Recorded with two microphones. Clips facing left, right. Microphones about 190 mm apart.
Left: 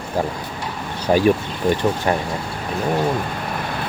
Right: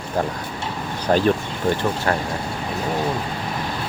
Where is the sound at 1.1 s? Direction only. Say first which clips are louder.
Left 2 dB; 5° left (ahead or behind).